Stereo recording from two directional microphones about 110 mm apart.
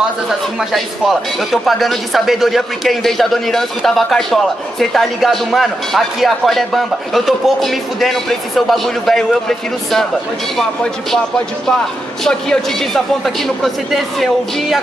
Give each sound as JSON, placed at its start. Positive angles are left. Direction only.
{"t": 0.6, "sound": "speech", "side_deg": 0}
{"t": 12.3, "sound": "speech", "side_deg": 5}